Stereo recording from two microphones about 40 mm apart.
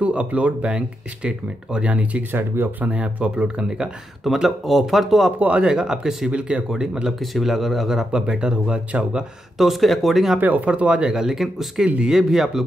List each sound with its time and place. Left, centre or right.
0.0 s speech: right
1.9 s speech: right
2.3 s speech: right
2.8 s speech: right
4.2 s speech: centre
5.6 s speech: centre
7.2 s speech: centre
8.1 s speech: right
9.6 s speech: centre
10.4 s speech: right
11.0 s speech: centre